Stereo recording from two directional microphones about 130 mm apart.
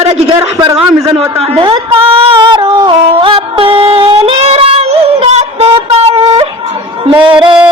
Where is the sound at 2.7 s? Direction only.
40° right (ahead or behind).